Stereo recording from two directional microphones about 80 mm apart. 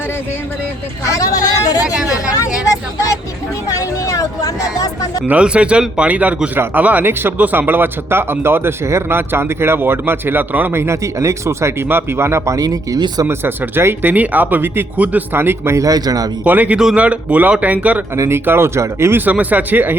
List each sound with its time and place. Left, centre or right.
1.0 s speech: left
2.6 s a sound: left
5.2 s speech: centre; by 12.5 s right
12.5 s a man's voice: right
13.2 s speech: right
15.8 s a man's voice: right
16.4 s speech: centre
18.1 s speech: right
19.2 s speech: right